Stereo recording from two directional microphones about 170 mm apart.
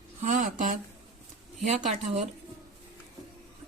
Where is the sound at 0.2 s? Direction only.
45° right (ahead or behind).